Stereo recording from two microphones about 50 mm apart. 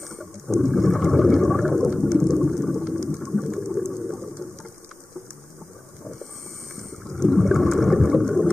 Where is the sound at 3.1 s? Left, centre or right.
Centre.